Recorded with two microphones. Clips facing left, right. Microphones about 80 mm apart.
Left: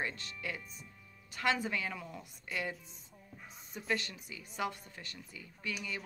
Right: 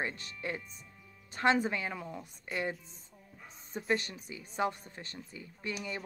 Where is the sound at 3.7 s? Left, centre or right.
Right.